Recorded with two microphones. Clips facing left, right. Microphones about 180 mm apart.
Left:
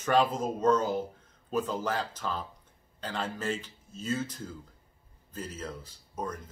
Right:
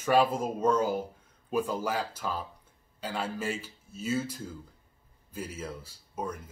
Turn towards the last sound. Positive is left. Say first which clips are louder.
# right 1 dB
turn(degrees=-10)  # may be behind; listen again after turning